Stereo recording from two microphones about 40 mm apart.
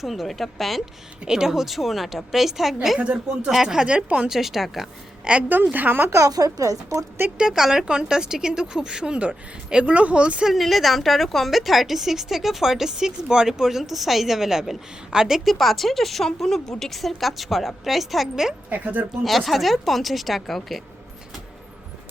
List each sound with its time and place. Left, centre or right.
0.0 s a woman's voice: centre
1.3 s a woman's voice: centre
3.0 s speech: right
3.5 s a woman's voice: centre
3.8 s speech: right
4.3 s a woman's voice: centre
5.2 s a woman's voice: right
5.7 s speech: right
7.3 s speech: centre
9.9 s speech: right
10.4 s a woman's voice: centre
15.5 s a woman's voice: centre
18.7 s speech: right
19.2 s a woman's voice: centre